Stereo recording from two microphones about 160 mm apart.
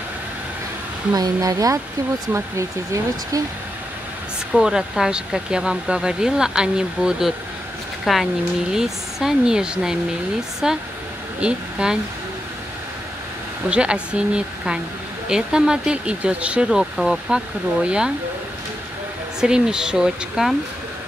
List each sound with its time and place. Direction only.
1.1 s speech: 25° right (ahead or behind)
4.5 s speech: 5° right (ahead or behind)
13.7 s speech: 5° right (ahead or behind)
19.4 s speech: 5° right (ahead or behind)